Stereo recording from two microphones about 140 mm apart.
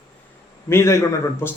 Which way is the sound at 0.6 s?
20° left (ahead or behind).